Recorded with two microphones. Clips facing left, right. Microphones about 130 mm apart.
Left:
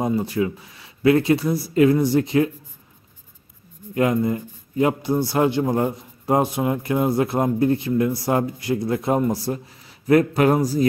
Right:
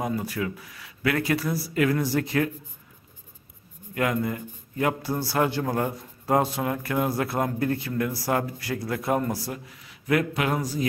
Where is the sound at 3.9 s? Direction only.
25° left (ahead or behind).